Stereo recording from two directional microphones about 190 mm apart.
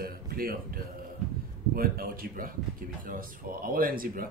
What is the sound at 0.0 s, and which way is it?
Speech, 50° right (ahead or behind).